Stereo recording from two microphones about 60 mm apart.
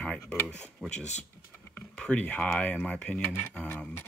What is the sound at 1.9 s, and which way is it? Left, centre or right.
Speech, centre.